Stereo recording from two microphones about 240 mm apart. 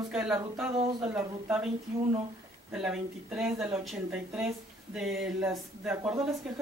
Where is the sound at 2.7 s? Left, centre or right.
Centre.